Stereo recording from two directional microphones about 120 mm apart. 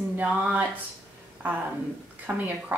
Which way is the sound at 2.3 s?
15° right (ahead or behind).